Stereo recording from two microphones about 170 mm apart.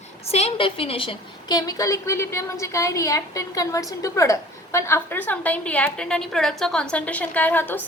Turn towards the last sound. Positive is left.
turn(degrees=10)  # may be behind; listen again after turning